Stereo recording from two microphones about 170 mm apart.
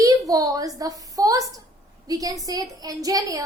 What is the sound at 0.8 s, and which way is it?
A woman's voice, 20° right (ahead or behind).